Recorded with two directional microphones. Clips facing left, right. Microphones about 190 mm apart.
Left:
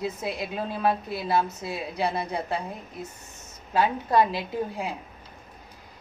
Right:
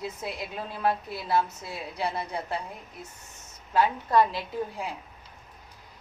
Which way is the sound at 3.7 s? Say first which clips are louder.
Left 1 dB; 20° left (ahead or behind).